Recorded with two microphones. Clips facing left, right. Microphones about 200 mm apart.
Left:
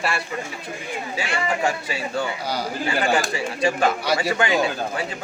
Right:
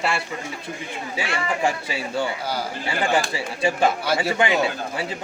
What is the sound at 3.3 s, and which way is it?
Speech, 25° right (ahead or behind).